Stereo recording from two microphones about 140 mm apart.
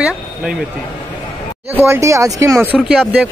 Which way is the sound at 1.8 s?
20° right (ahead or behind).